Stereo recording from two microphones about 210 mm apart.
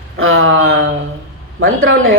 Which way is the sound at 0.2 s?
70° right (ahead or behind).